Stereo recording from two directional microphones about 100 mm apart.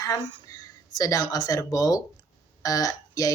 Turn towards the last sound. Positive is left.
turn(degrees=35)  # may be behind; listen again after turning